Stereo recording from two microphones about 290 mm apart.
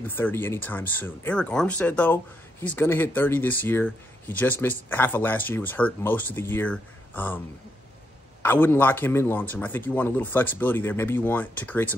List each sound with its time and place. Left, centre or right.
0.0 s speech: centre